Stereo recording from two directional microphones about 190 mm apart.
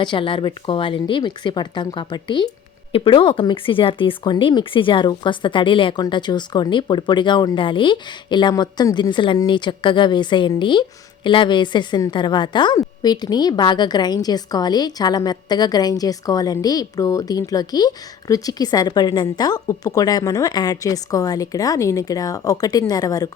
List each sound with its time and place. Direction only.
0.0 s speech: 25° left (ahead or behind)